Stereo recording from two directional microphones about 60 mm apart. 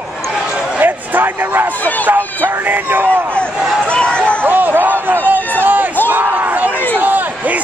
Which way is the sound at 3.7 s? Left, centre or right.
Centre.